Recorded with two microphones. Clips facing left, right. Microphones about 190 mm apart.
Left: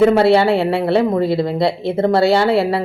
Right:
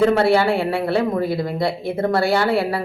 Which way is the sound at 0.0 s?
25° left (ahead or behind).